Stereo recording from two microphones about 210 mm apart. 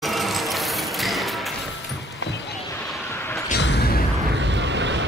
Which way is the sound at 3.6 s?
50° left (ahead or behind).